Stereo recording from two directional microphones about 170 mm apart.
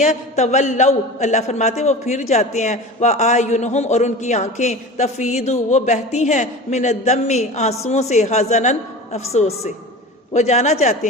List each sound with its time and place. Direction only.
0.0 s a man's voice: 45° left (ahead or behind)